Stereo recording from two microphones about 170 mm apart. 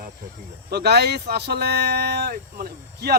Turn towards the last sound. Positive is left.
turn(degrees=-65)  # may be behind; listen again after turning